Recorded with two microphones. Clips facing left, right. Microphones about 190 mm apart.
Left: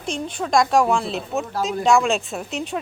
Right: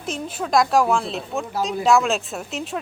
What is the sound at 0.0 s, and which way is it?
Speech, 5° right (ahead or behind).